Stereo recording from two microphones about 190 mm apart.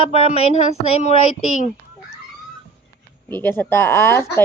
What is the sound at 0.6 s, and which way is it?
Speech, 35° left (ahead or behind).